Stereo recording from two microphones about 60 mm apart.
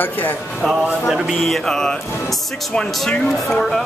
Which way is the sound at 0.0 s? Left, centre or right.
Left.